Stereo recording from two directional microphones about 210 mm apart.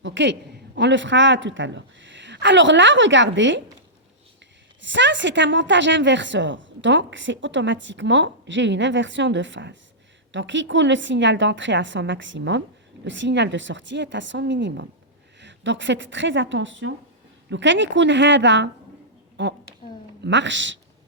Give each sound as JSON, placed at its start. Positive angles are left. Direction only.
{"t": 0.0, "sound": "a woman's voice", "side_deg": -60}
{"t": 4.8, "sound": "a woman's voice", "side_deg": -60}